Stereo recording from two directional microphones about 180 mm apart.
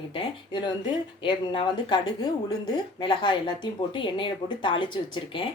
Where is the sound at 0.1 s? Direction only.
25° left (ahead or behind).